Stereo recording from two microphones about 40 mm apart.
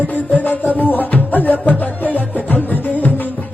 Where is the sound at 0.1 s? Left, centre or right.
Left.